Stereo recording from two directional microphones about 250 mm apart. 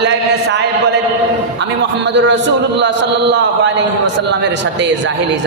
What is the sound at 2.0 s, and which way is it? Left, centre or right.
A man's voice, right.